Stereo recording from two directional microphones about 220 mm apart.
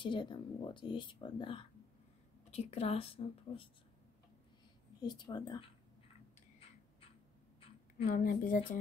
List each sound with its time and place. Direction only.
0.0 s speech: 20° left (ahead or behind)
5.0 s speech: 20° left (ahead or behind)
8.1 s a woman's voice: 40° left (ahead or behind)